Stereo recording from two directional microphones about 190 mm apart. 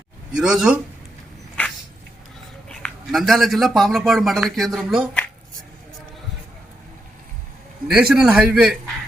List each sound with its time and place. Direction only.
0.3 s a man's voice: 5° right (ahead or behind)
2.6 s a man's voice: centre (ahead or behind)
7.9 s a man's voice: 5° right (ahead or behind)